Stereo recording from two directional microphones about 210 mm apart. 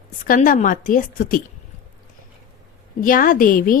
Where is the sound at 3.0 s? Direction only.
40° left (ahead or behind).